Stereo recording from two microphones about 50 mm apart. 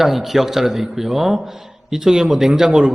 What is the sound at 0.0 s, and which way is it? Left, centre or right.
A man's voice, centre.